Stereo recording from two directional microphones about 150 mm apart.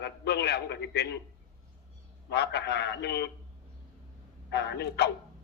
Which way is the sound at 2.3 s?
90° left.